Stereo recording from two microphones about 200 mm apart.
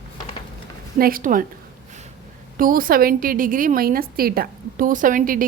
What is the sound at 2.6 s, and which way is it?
A woman's voice, 45° right (ahead or behind).